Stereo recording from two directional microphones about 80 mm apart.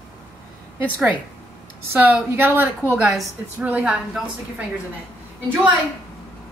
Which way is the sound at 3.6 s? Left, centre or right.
Centre.